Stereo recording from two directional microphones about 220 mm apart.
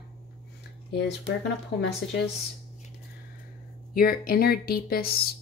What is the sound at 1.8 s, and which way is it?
Speech, 50° left (ahead or behind).